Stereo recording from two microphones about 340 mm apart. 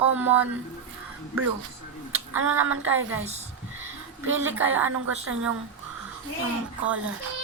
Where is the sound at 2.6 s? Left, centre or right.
Centre.